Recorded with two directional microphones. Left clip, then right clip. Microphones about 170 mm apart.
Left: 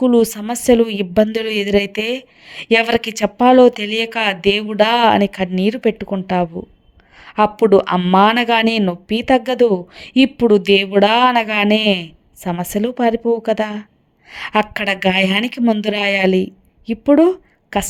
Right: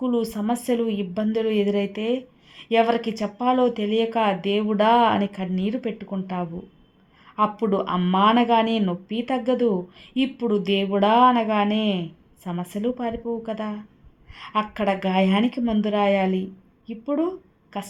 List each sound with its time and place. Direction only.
0.0 s a woman's voice: 45° left (ahead or behind)